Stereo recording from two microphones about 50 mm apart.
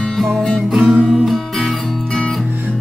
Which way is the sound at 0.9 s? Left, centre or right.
Centre.